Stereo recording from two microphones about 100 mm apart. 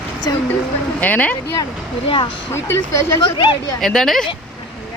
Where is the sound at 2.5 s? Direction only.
25° left (ahead or behind).